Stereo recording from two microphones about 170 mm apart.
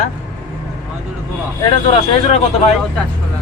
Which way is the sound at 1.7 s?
30° left (ahead or behind).